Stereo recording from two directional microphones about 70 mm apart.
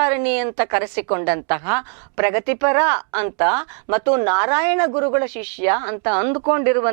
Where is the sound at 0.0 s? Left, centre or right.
Centre.